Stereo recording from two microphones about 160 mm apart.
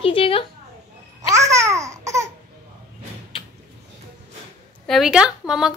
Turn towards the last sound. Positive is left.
turn(degrees=-5)  # may be behind; listen again after turning